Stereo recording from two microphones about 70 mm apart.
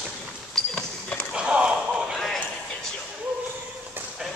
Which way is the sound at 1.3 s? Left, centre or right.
Centre.